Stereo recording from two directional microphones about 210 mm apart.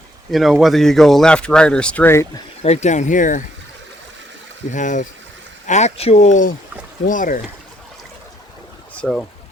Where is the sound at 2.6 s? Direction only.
30° left (ahead or behind).